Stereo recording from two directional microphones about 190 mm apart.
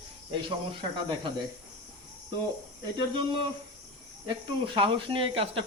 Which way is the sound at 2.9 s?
25° right (ahead or behind).